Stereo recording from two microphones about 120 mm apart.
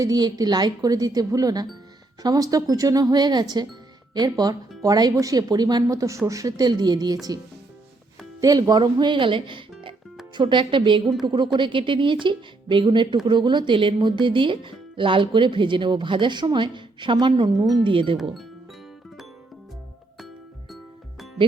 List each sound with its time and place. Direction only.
0.0 s speech: 35° right (ahead or behind)
8.4 s speech: 30° right (ahead or behind)
11.0 s a woman's voice: centre (ahead or behind)
11.3 s speech: 40° right (ahead or behind)
17.9 s speech: 45° right (ahead or behind)